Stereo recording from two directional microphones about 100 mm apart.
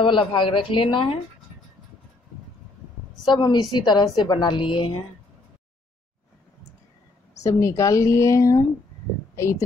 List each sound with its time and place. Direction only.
0.0 s speech: 60° left (ahead or behind)
3.3 s a woman's voice: 45° left (ahead or behind)
7.4 s a woman's voice: 30° left (ahead or behind)